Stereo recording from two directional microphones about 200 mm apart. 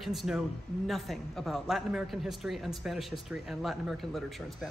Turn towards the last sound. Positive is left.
turn(degrees=0)  # may be behind; listen again after turning